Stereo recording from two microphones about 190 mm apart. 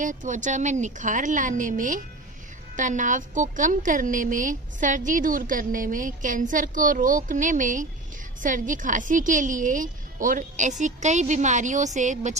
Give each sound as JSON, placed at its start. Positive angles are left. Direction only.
{"t": 0.0, "sound": "a woman's voice", "side_deg": -40}